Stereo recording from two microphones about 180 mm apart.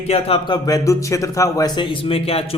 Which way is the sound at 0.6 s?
20° left (ahead or behind).